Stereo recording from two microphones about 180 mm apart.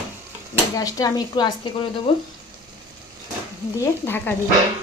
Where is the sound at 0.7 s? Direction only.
20° left (ahead or behind).